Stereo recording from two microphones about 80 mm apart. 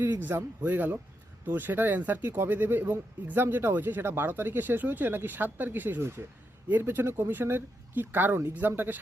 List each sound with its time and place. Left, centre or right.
0.0 s speech: right